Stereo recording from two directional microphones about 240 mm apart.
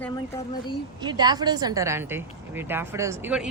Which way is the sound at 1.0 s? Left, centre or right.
Centre.